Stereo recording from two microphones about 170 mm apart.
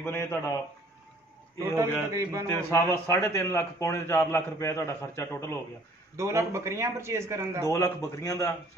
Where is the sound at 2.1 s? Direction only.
20° right (ahead or behind).